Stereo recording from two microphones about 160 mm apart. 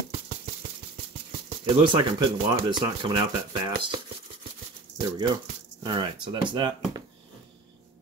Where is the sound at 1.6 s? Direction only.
30° right (ahead or behind).